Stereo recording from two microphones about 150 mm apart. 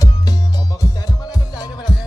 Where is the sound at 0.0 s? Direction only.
25° left (ahead or behind).